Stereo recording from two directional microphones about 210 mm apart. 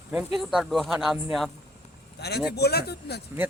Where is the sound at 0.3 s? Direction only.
Centre (ahead or behind).